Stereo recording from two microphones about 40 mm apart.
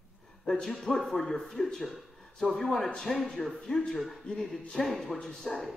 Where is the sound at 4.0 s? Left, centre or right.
Centre.